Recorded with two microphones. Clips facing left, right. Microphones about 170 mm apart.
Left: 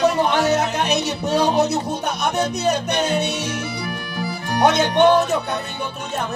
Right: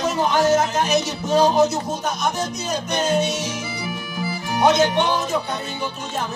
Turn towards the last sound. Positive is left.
turn(degrees=55)  # may be behind; listen again after turning